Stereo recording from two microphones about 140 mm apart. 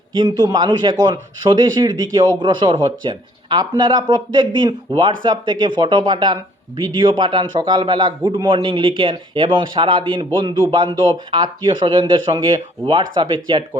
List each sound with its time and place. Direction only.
0.1 s speech: 30° right (ahead or behind)
11.3 s speech: 35° right (ahead or behind)